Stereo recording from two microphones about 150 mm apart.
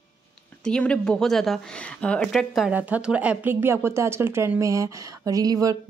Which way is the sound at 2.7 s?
10° right (ahead or behind).